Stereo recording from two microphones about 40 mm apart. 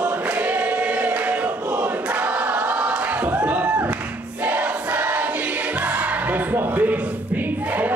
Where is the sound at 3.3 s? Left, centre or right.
Right.